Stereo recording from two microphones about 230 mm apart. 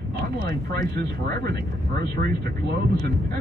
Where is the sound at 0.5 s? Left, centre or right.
Right.